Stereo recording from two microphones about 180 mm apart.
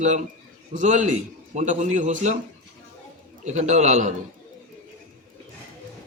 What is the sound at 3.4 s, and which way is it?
Speech, 40° right (ahead or behind).